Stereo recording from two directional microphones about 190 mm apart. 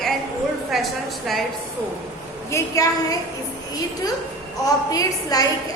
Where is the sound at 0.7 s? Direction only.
Centre (ahead or behind).